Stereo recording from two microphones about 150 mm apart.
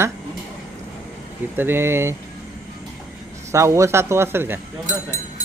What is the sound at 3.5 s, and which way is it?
Speech, 20° right (ahead or behind).